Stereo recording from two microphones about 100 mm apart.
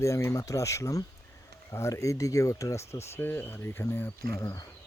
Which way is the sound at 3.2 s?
20° left (ahead or behind).